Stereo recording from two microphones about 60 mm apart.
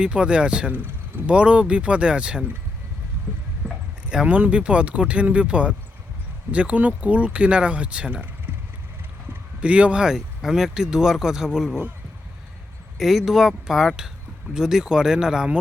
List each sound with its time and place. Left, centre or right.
0.0 s speech: centre
0.7 s a sound: right
1.3 s speech: centre
4.1 s speech: centre
9.6 s speech: centre
13.0 s speech: centre